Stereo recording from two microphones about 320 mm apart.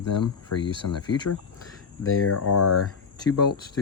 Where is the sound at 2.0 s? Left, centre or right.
Left.